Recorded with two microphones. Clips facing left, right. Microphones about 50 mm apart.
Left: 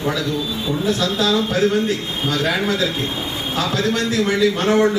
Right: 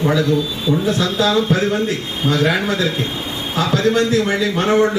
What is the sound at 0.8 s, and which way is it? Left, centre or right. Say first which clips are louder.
Speech: left 1 dB; right.